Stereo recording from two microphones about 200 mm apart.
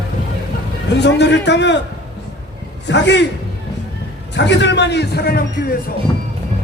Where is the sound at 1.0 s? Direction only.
60° left (ahead or behind).